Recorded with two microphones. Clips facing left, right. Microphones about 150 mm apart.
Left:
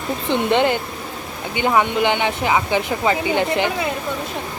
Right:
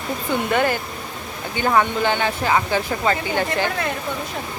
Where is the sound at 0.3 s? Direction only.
20° left (ahead or behind).